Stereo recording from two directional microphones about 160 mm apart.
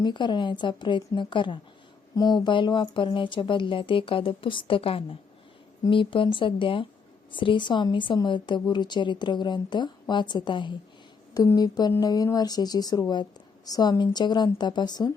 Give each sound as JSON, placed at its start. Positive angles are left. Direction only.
{"t": 0.0, "sound": "a woman's voice", "side_deg": 30}